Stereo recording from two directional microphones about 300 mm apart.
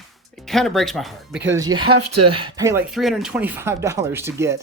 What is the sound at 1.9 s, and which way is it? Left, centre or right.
Speech, right.